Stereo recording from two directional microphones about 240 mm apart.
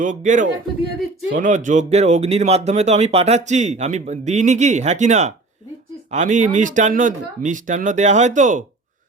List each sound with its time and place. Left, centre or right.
0.0 s speech: right